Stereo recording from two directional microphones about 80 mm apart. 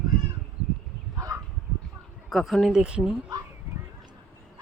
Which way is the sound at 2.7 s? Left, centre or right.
Centre.